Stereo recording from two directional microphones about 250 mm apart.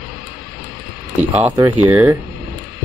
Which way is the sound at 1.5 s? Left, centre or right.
Centre.